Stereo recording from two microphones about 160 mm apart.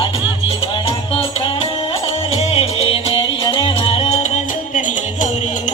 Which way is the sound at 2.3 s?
40° left (ahead or behind).